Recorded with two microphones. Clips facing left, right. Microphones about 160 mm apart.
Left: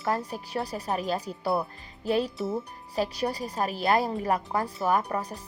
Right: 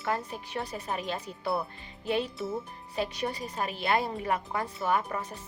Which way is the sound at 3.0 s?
35° left (ahead or behind).